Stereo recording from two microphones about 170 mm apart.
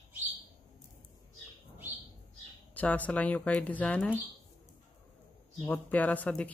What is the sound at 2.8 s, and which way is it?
Speech, 10° left (ahead or behind).